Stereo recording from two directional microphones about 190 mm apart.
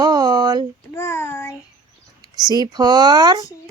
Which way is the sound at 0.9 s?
15° left (ahead or behind).